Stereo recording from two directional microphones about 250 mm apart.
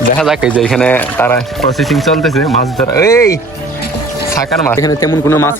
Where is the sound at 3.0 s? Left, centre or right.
Centre.